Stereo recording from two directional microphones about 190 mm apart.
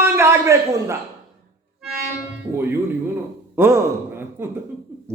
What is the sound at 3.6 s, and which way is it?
Gasp, 15° right (ahead or behind).